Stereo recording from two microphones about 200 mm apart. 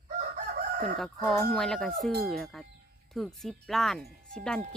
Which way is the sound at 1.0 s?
Centre (ahead or behind).